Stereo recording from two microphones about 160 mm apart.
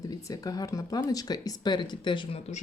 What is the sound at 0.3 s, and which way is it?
Speech, 20° left (ahead or behind).